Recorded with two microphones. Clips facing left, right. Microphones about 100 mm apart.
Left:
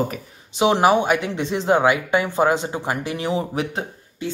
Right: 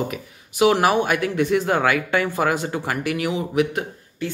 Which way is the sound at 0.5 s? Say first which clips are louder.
Left 1 dB; 20° left (ahead or behind).